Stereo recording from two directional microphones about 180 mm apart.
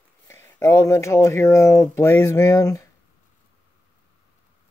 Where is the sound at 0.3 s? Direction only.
15° left (ahead or behind).